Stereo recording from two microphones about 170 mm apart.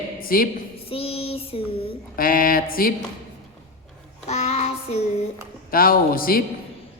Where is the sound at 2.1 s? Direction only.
55° left (ahead or behind).